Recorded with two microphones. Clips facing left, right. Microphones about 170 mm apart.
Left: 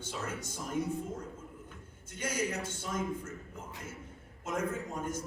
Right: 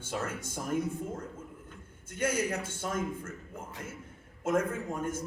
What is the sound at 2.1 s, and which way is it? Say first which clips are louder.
Speech: right 7 dB; 55° right (ahead or behind).